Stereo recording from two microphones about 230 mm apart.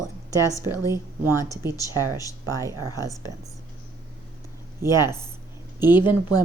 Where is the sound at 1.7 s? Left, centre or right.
Centre.